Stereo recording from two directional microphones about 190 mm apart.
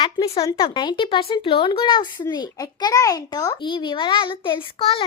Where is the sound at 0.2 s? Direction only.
25° left (ahead or behind).